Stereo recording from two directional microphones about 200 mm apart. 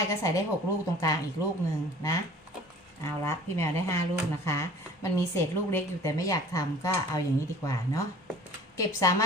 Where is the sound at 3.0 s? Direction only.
15° left (ahead or behind).